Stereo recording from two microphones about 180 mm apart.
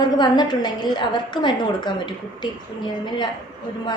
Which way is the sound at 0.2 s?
25° left (ahead or behind).